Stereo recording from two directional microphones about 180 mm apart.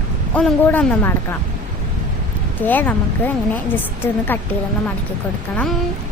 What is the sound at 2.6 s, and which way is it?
Speech, 10° left (ahead or behind).